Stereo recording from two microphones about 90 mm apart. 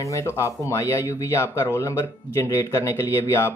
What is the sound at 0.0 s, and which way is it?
Speech, 35° left (ahead or behind).